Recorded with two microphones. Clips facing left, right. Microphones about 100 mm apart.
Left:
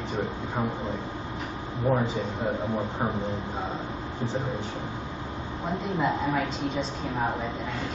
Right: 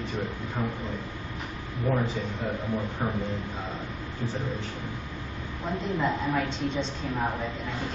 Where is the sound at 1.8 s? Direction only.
25° left (ahead or behind).